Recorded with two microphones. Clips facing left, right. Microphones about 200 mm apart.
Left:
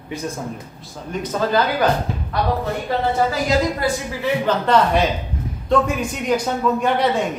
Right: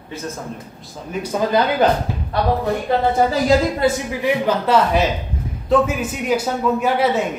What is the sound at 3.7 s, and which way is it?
Speech, 20° right (ahead or behind).